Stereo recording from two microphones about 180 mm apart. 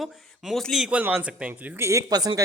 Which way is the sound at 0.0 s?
Centre (ahead or behind).